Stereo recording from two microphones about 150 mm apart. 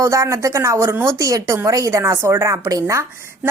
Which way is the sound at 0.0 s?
20° right (ahead or behind).